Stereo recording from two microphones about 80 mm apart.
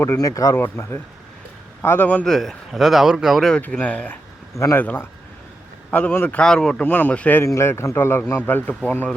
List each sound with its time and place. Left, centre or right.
0.2 s speech: left
0.5 s a man's voice: left
2.2 s speech: centre
3.6 s a man's voice: centre
4.5 s a man's voice: left
4.8 s a man's voice: left
6.4 s speech: centre
7.4 s a man's voice: left